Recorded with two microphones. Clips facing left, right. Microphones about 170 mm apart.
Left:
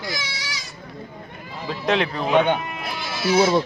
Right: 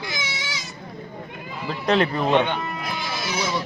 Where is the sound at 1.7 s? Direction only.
Centre (ahead or behind).